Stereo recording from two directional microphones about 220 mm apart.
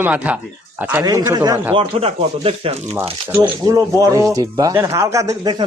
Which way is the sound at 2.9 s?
15° right (ahead or behind).